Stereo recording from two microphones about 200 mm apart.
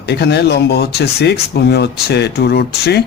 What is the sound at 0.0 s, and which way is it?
Speech, 55° left (ahead or behind).